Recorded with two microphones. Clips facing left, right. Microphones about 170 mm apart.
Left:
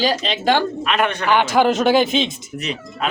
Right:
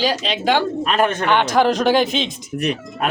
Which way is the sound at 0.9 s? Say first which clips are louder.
Right 2 dB; 40° right (ahead or behind).